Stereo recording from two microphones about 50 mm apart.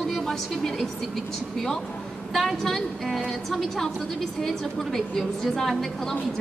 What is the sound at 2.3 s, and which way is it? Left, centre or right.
A woman's voice, centre.